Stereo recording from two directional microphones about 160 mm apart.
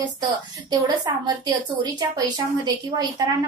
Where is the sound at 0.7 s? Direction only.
25° right (ahead or behind).